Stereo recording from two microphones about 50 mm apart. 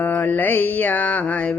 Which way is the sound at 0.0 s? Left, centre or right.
Left.